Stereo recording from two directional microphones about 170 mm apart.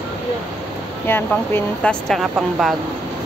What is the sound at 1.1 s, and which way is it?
Speech, 10° left (ahead or behind).